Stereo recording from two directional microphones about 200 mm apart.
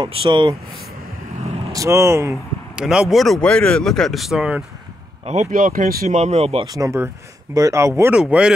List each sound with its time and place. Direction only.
0.0 s speech: 25° right (ahead or behind)
1.7 s speech: 15° right (ahead or behind)
5.2 s speech: 35° right (ahead or behind)
6.6 s speech: 15° right (ahead or behind)